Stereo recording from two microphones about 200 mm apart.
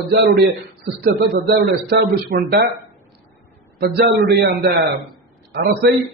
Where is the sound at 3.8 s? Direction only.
50° right (ahead or behind).